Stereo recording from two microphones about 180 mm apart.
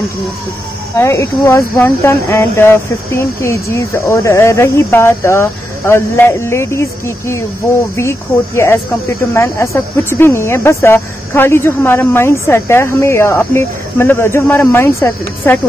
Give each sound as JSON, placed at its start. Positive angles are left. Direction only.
{"t": 0.9, "sound": "speech", "side_deg": 15}